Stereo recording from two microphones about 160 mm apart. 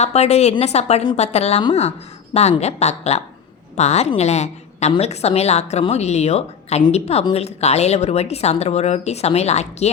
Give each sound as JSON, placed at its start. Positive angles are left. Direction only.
{"t": 0.0, "sound": "a woman's voice", "side_deg": 45}